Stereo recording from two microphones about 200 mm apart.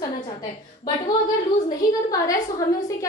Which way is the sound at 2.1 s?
15° left (ahead or behind).